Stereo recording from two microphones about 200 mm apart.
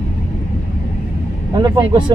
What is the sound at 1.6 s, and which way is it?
Vehicle, 20° right (ahead or behind).